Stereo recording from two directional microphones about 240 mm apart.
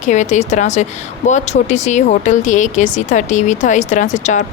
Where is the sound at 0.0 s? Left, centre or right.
Left.